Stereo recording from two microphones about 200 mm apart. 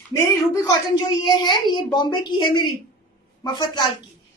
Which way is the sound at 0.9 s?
20° left (ahead or behind).